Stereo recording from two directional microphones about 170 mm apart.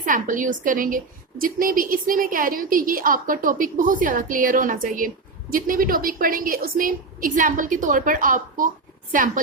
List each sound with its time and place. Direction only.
0.0 s a woman's voice: 50° right (ahead or behind)